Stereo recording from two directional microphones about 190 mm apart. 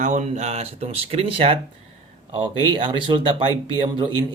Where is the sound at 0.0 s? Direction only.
40° right (ahead or behind).